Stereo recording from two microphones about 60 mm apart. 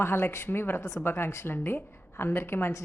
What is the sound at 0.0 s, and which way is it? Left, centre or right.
Speech, left.